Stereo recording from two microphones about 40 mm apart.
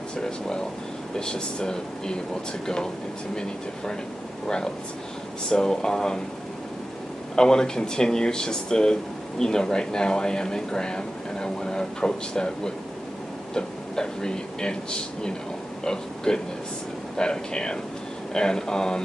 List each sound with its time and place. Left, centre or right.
0.2 s air conditioning: centre
1.1 s speech: centre
5.5 s speech: centre
7.3 s speech: centre